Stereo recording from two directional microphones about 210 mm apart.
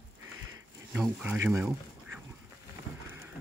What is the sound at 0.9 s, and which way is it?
Speech, 5° right (ahead or behind).